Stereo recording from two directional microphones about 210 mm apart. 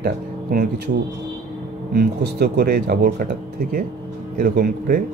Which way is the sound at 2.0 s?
50° right (ahead or behind).